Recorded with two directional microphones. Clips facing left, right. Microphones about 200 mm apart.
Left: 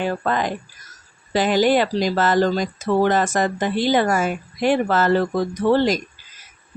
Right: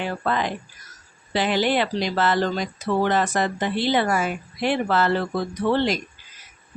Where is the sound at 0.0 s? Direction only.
45° left (ahead or behind).